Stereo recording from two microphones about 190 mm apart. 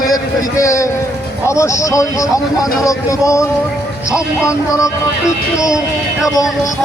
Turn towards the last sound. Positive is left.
turn(degrees=15)  # may be behind; listen again after turning